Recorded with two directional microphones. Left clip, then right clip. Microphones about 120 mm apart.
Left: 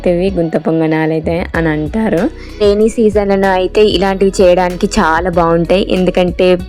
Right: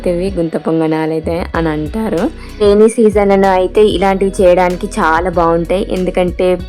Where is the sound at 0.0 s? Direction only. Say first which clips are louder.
Left 2 dB; 5° left (ahead or behind).